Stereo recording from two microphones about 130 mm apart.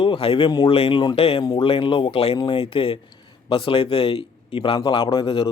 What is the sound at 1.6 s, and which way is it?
Speech, 45° left (ahead or behind).